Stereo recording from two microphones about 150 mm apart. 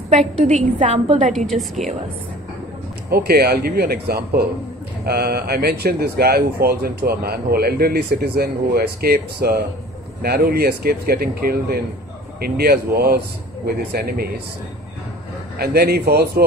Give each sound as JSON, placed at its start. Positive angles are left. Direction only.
{"t": 0.1, "sound": "a woman's voice", "side_deg": -50}
{"t": 1.5, "sound": "a woman's voice", "side_deg": 0}
{"t": 3.1, "sound": "speech", "side_deg": -90}
{"t": 15.5, "sound": "speech", "side_deg": -90}